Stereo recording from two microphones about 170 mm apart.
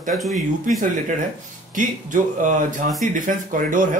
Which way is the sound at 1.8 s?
50° right (ahead or behind).